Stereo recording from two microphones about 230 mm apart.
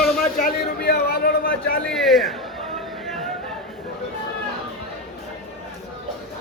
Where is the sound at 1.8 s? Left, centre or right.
Centre.